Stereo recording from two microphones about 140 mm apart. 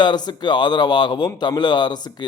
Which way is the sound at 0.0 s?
30° left (ahead or behind).